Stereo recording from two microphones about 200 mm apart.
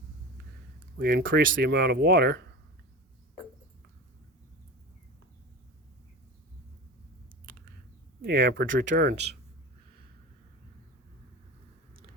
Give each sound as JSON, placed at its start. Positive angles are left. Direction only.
{"t": 0.9, "sound": "speech", "side_deg": -45}
{"t": 1.2, "sound": "speech", "side_deg": -70}
{"t": 8.2, "sound": "speech", "side_deg": -60}